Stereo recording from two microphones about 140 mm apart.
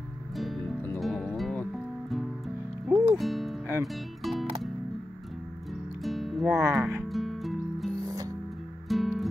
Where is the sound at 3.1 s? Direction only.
Centre (ahead or behind).